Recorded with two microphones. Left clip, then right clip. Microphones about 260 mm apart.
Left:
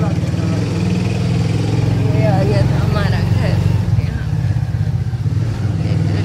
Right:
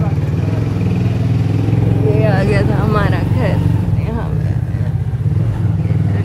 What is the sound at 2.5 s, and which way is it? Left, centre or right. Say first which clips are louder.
Vehicle: right 4 dB; right.